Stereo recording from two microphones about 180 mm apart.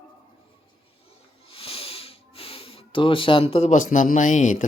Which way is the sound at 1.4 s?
30° left (ahead or behind).